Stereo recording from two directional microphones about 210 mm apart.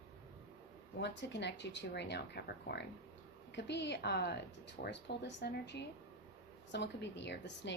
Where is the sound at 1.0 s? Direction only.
55° left (ahead or behind).